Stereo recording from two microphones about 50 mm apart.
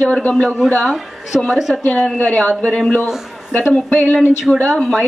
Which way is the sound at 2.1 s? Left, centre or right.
Left.